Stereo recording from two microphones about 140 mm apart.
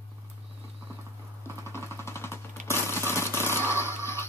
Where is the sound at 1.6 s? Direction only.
20° left (ahead or behind).